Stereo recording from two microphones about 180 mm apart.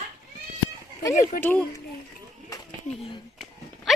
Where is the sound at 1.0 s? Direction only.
20° left (ahead or behind).